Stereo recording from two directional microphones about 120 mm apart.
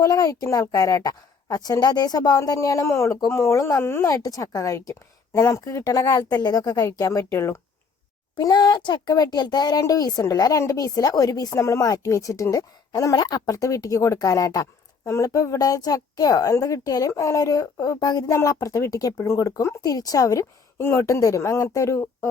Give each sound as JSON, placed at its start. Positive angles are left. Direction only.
{"t": 0.0, "sound": "speech", "side_deg": 30}
{"t": 8.4, "sound": "speech", "side_deg": 40}